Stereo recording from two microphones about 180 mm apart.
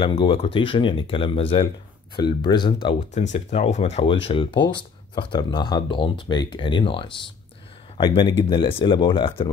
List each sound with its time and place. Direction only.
0.0 s speech: 30° left (ahead or behind)
3.3 s speech: 40° left (ahead or behind)